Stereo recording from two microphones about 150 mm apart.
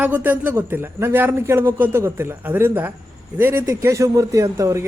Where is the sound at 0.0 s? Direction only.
10° right (ahead or behind).